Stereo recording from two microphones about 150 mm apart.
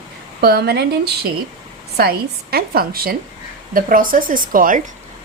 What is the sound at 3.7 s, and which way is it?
Speech, 70° right (ahead or behind).